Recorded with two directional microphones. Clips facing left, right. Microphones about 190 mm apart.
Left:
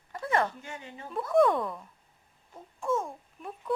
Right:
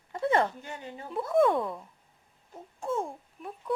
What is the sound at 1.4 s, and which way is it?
Speech, 10° right (ahead or behind).